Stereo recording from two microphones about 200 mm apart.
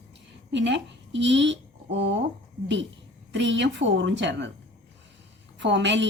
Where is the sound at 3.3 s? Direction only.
65° right (ahead or behind).